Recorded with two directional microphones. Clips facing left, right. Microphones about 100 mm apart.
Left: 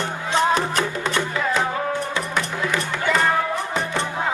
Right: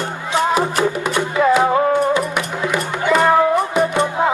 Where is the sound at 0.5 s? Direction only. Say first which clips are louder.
Right 5 dB; 10° right (ahead or behind).